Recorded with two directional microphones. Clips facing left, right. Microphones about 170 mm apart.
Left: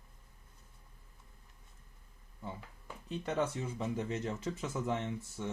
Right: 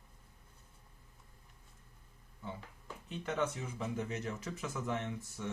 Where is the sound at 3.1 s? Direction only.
35° left (ahead or behind).